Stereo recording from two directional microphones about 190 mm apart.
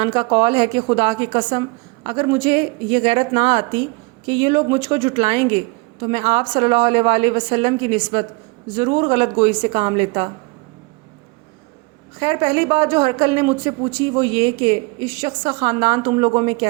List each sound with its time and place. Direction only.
0.0 s speech: 30° right (ahead or behind)
12.2 s speech: 25° right (ahead or behind)